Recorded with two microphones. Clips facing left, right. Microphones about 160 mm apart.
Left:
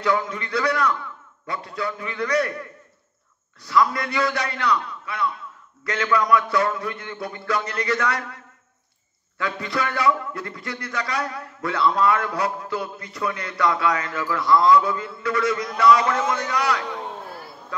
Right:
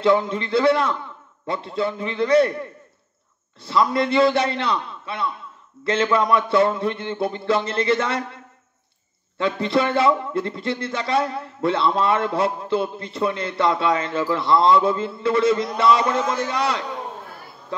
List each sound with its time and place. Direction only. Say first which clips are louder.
0.0 s a man's voice: right 5 dB; 25° right (ahead or behind)
9.4 s a man's voice: right 6 dB; 25° right (ahead or behind)